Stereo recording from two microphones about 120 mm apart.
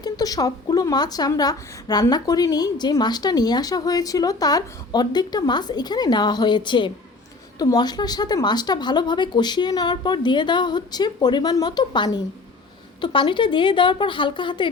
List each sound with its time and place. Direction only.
0.0 s a woman's voice: 30° left (ahead or behind)